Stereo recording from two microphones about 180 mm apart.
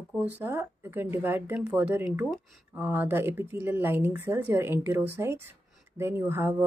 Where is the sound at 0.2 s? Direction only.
10° right (ahead or behind).